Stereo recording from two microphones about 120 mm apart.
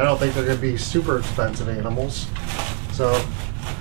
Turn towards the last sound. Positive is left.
turn(degrees=-10)  # may be behind; listen again after turning